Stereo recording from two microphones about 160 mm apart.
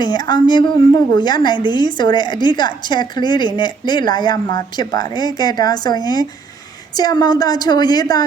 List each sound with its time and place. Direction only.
0.0 s a woman's voice: 25° left (ahead or behind)